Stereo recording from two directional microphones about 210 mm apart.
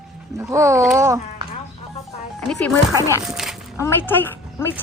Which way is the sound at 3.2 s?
Centre (ahead or behind).